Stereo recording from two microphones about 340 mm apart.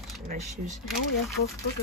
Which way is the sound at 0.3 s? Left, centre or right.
Right.